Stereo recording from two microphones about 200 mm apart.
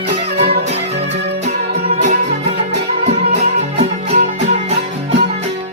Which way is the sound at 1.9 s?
35° right (ahead or behind).